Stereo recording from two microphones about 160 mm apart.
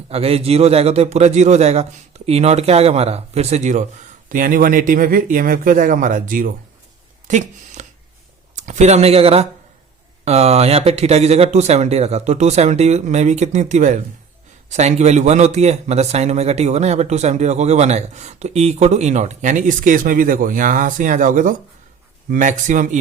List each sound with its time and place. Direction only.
0.1 s a man's voice: 40° right (ahead or behind)
4.3 s speech: 60° right (ahead or behind)
7.3 s a sound: 50° right (ahead or behind)
8.5 s a man's voice: 50° right (ahead or behind)